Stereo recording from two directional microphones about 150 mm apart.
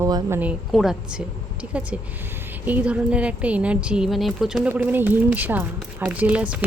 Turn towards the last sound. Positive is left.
turn(degrees=-10)  # may be behind; listen again after turning